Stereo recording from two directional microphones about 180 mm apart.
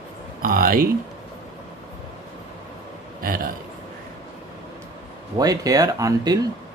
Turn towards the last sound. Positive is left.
turn(degrees=-20)  # may be behind; listen again after turning